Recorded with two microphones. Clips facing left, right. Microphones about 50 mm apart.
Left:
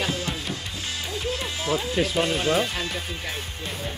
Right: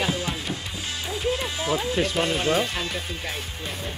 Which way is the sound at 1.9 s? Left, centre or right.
Centre.